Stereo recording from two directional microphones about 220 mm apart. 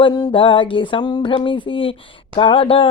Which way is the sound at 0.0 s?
20° left (ahead or behind).